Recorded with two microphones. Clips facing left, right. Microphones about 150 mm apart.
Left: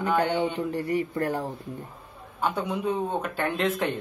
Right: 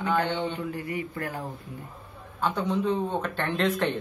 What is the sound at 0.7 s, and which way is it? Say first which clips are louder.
Speech: left 6 dB; 35° left (ahead or behind).